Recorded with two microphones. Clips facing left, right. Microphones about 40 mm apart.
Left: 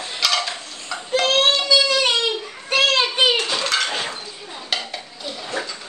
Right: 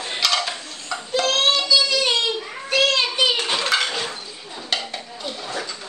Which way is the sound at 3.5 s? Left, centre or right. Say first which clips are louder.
Right 1 dB; centre.